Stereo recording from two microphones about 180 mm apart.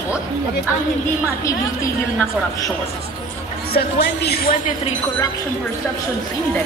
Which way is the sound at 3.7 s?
65° left (ahead or behind).